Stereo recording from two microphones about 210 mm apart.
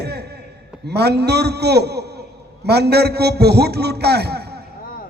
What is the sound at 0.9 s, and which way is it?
A man's voice, 50° right (ahead or behind).